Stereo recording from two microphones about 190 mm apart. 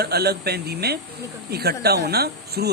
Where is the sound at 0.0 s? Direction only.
60° right (ahead or behind).